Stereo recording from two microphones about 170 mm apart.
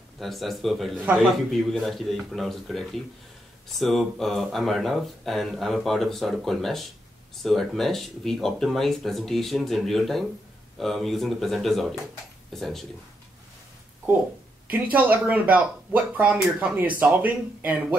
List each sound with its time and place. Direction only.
0.2 s speech: centre (ahead or behind)
14.7 s speech: 10° right (ahead or behind)